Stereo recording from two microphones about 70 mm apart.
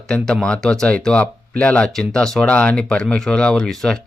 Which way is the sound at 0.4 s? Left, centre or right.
Centre.